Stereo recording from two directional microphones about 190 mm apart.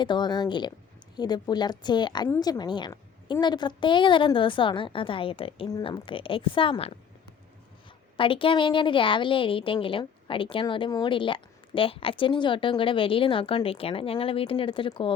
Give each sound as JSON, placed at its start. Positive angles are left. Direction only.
{"t": 0.0, "sound": "a woman's voice", "side_deg": 25}
{"t": 8.1, "sound": "a woman's voice", "side_deg": 30}